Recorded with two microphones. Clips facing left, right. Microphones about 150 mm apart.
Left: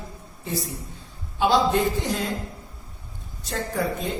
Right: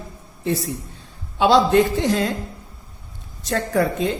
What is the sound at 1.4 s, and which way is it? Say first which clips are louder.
Speech: right 5 dB; 75° right (ahead or behind).